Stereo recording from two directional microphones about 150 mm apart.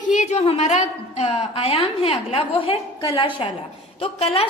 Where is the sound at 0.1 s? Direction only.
50° left (ahead or behind).